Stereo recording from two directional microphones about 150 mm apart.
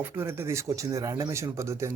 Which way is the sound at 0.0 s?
15° right (ahead or behind).